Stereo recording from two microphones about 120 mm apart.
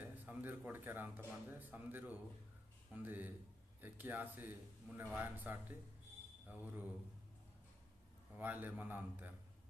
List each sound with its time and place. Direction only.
0.0 s a man's voice: 15° right (ahead or behind)
8.4 s a man's voice: 15° right (ahead or behind)